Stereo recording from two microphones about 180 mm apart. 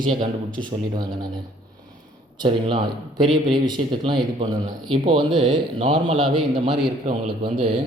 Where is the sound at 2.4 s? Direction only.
30° right (ahead or behind).